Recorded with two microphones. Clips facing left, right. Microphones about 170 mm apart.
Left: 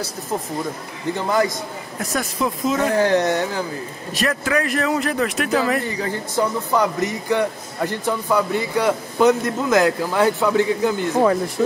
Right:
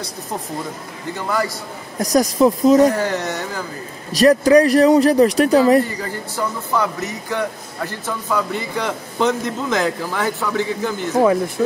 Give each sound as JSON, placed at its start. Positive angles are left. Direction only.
{"t": 1.1, "sound": "a man's voice", "side_deg": 20}
{"t": 2.0, "sound": "speech", "side_deg": -40}
{"t": 3.0, "sound": "a man's voice", "side_deg": 15}
{"t": 4.1, "sound": "speech", "side_deg": -35}
{"t": 6.3, "sound": "a man's voice", "side_deg": 15}